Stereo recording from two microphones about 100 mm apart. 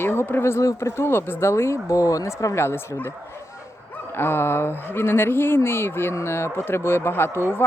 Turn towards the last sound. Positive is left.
turn(degrees=25)  # may be behind; listen again after turning